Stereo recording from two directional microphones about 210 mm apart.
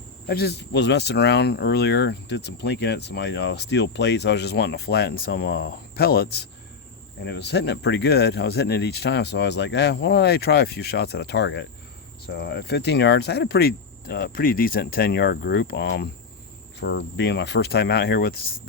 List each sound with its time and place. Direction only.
0.3 s speech: 50° left (ahead or behind)